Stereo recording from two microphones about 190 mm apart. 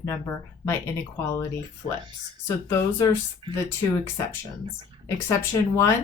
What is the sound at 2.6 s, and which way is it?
Speech, 15° left (ahead or behind).